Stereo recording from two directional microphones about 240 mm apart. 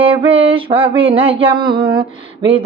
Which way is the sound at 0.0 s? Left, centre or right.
Right.